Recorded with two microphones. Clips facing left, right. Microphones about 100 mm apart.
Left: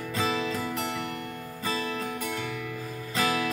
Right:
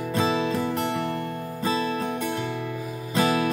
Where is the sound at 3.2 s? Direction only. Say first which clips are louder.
Right 5 dB; 30° right (ahead or behind).